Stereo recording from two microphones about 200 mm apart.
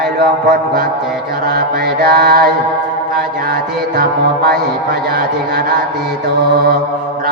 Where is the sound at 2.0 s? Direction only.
50° right (ahead or behind).